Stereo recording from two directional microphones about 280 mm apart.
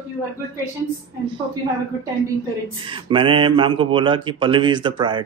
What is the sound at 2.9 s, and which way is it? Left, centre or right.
Speech, centre.